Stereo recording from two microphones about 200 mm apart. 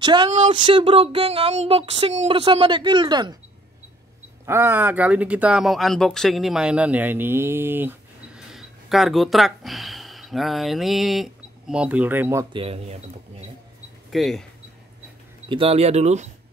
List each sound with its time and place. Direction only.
0.0 s speech: 20° right (ahead or behind)
0.3 s speech: 35° right (ahead or behind)
4.5 s speech: 10° right (ahead or behind)
12.5 s speech: 30° right (ahead or behind)
14.1 s speech: centre (ahead or behind)
15.4 s speech: 25° right (ahead or behind)